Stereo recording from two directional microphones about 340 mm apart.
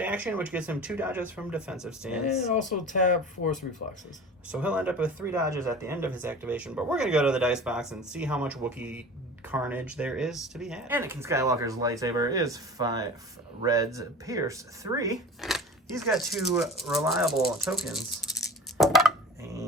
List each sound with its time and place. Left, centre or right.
0.0 s speech: centre
2.3 s speech: centre
4.4 s speech: centre
18.3 s coin: centre